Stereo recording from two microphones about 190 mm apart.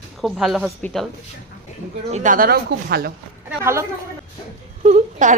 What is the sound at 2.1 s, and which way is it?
A woman's voice, 40° right (ahead or behind).